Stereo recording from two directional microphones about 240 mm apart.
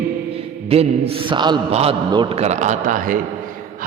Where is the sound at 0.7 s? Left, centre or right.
Right.